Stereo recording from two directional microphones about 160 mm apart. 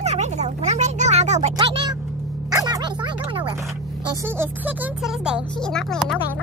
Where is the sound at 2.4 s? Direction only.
20° right (ahead or behind).